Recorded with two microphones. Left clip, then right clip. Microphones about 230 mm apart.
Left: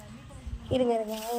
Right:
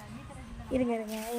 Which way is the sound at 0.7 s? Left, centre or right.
Centre.